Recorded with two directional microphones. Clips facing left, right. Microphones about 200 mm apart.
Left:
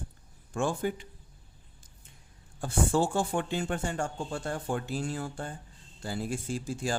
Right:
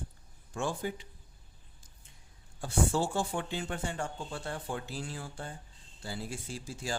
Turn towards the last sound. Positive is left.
turn(degrees=50)  # may be behind; listen again after turning